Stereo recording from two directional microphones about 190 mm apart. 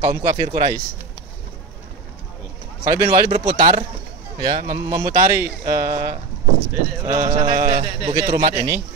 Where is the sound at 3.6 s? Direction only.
20° right (ahead or behind).